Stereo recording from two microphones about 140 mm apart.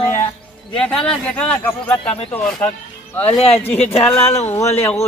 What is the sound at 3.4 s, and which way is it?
Speech, 45° left (ahead or behind).